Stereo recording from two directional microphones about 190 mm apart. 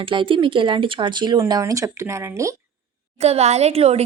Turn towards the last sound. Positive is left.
turn(degrees=-35)  # may be behind; listen again after turning